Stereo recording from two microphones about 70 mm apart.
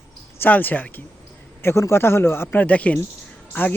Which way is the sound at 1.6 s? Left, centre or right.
Left.